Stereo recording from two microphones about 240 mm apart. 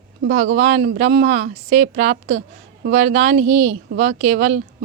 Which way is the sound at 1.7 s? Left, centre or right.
Right.